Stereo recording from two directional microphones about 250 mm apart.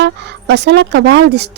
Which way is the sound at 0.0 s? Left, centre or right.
Right.